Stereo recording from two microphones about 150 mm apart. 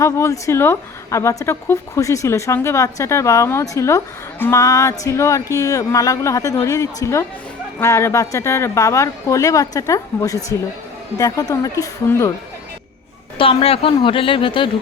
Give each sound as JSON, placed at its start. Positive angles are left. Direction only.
{"t": 0.0, "sound": "speech", "side_deg": 20}
{"t": 13.4, "sound": "speech", "side_deg": 40}